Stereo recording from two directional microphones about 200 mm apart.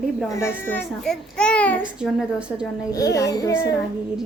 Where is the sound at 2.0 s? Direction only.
5° right (ahead or behind).